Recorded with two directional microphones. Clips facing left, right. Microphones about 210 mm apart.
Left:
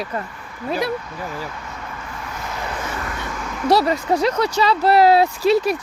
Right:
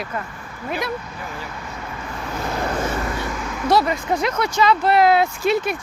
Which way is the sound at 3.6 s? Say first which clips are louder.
Left 2 dB; 35° left (ahead or behind).